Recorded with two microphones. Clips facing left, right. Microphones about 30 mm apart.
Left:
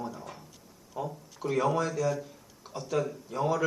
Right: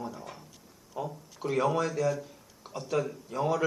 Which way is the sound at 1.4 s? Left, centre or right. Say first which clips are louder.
Even; right.